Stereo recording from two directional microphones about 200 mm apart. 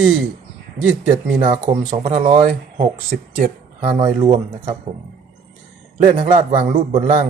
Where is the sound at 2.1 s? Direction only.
35° right (ahead or behind).